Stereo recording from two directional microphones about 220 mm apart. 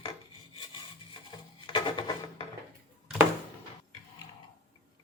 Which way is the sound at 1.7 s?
20° left (ahead or behind).